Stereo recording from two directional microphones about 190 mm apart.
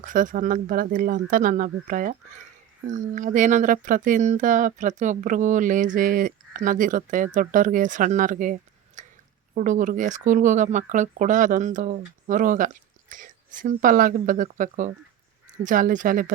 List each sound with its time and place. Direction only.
0.0 s speech: 45° right (ahead or behind)
9.0 s a sound: 40° right (ahead or behind)
9.6 s speech: 40° right (ahead or behind)